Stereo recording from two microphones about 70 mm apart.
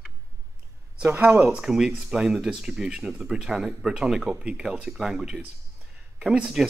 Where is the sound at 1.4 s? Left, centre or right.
Centre.